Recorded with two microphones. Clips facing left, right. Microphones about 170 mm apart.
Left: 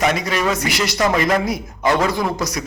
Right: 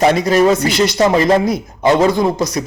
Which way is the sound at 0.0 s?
30° right (ahead or behind).